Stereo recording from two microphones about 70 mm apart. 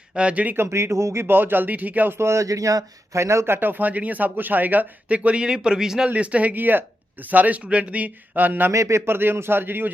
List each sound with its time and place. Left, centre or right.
0.1 s speech: centre
0.5 s speech: right
2.1 s speech: right; by 6.1 s centre
6.1 s speech: centre
8.7 s speech: right
9.1 s speech: right